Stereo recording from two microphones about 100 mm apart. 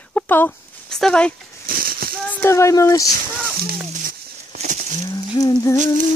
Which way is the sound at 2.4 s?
30° left (ahead or behind).